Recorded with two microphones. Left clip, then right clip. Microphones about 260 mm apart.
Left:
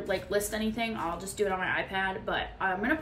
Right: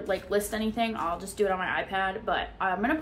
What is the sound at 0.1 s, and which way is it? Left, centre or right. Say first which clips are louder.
A woman's voice: right 2 dB; centre.